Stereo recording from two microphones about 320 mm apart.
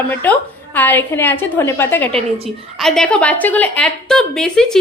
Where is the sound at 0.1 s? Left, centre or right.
Centre.